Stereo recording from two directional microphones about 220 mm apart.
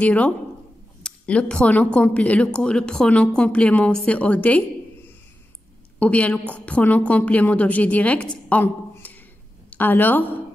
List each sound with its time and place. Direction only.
0.0 s a woman's voice: 5° left (ahead or behind)
5.9 s a woman's voice: 5° left (ahead or behind)
8.5 s a sound: 5° left (ahead or behind)
9.7 s a woman's voice: 10° left (ahead or behind)